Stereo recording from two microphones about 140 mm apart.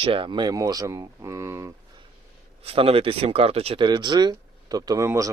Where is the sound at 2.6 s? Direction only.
45° right (ahead or behind).